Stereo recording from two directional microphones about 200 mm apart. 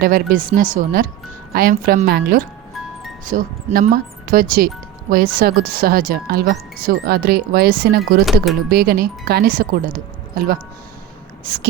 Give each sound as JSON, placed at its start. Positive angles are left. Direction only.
{"t": 0.0, "sound": "speech", "side_deg": -45}